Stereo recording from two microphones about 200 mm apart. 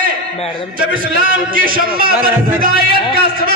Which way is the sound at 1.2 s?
45° right (ahead or behind).